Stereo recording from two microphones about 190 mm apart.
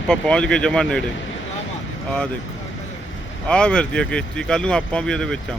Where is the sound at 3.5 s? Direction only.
5° left (ahead or behind).